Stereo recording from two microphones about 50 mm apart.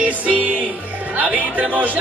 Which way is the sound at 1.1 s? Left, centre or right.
Right.